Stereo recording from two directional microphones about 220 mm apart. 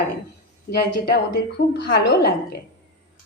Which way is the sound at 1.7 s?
45° left (ahead or behind).